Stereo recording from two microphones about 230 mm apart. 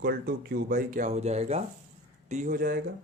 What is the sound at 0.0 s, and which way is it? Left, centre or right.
Speech, right.